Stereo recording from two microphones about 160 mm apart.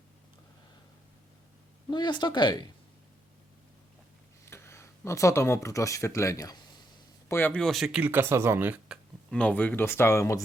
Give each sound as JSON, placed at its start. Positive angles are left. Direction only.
{"t": 1.9, "sound": "speech", "side_deg": 30}
{"t": 4.4, "sound": "speech", "side_deg": 15}
{"t": 7.3, "sound": "speech", "side_deg": 15}
{"t": 9.3, "sound": "speech", "side_deg": 10}